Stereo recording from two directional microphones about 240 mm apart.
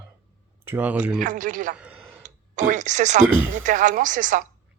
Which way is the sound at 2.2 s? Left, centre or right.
Right.